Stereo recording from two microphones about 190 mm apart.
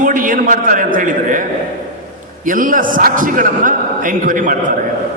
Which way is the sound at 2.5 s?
45° right (ahead or behind).